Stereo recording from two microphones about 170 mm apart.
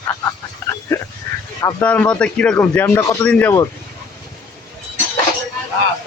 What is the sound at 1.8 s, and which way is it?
Speech, 10° left (ahead or behind).